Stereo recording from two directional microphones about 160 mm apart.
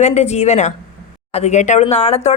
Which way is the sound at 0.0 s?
45° left (ahead or behind).